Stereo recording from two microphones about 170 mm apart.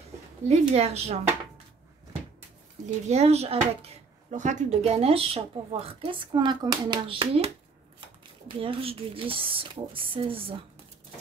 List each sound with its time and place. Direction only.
0.5 s speech: 40° right (ahead or behind)
3.1 s speech: 40° right (ahead or behind)